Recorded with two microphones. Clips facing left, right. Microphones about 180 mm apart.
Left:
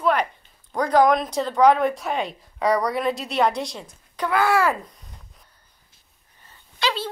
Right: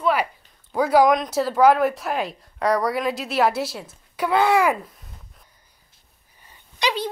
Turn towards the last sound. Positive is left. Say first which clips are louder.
# right 2 dB
turn(degrees=-15)  # may be behind; listen again after turning